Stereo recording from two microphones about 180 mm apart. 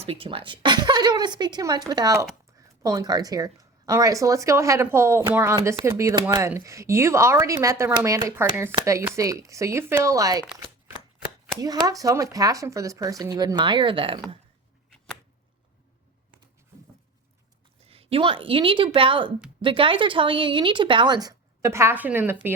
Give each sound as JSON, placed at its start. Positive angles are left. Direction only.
{"t": 0.0, "sound": "speech", "side_deg": -30}
{"t": 11.6, "sound": "speech", "side_deg": -20}
{"t": 17.8, "sound": "speech", "side_deg": -35}